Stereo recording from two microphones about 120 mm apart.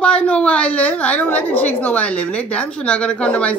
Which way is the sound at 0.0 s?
10° left (ahead or behind).